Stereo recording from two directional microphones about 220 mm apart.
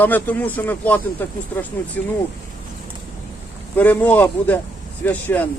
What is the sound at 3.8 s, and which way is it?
A man's voice, 5° left (ahead or behind).